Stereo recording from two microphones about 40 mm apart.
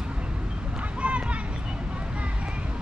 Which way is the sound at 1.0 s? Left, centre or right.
Right.